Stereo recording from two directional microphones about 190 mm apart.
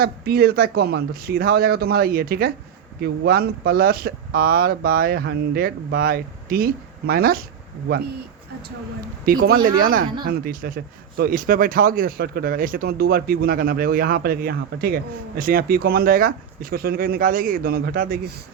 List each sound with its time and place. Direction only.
0.0 s speech: 55° right (ahead or behind)
9.2 s speech: 50° right (ahead or behind)